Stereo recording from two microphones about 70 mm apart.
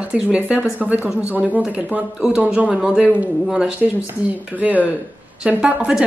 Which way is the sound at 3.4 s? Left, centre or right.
Centre.